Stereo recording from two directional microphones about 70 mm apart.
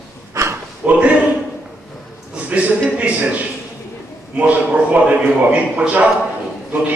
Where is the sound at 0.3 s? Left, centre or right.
Right.